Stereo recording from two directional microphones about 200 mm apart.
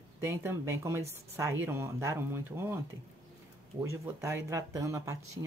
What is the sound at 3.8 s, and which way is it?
Speech, 15° right (ahead or behind).